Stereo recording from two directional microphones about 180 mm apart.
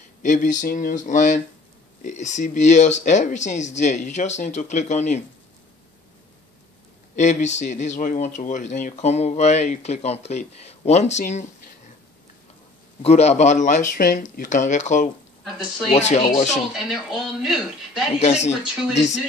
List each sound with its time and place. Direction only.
0.2 s speech: 45° left (ahead or behind)
7.2 s speech: 40° left (ahead or behind)
13.0 s speech: 35° left (ahead or behind)
16.5 s speech: centre (ahead or behind)
18.2 s speech: 40° left (ahead or behind)